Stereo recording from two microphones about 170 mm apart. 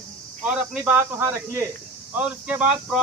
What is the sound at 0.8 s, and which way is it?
Speech, 10° right (ahead or behind).